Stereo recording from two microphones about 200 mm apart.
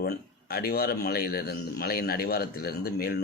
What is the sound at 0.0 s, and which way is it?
Speech, 50° left (ahead or behind).